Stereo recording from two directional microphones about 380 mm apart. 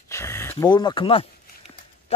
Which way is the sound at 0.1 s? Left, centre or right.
Centre.